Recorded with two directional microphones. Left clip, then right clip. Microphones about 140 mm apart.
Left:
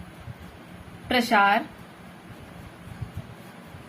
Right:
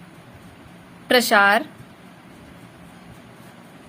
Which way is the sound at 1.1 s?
90° right.